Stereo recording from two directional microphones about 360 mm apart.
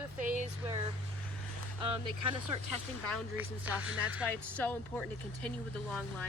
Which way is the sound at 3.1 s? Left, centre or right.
Centre.